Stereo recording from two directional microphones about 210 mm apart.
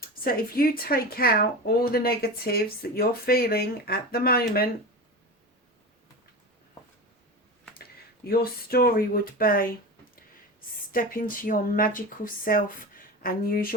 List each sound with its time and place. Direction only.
0.3 s speech: 45° left (ahead or behind)
7.8 s speech: 45° left (ahead or behind)
10.9 s speech: 40° left (ahead or behind)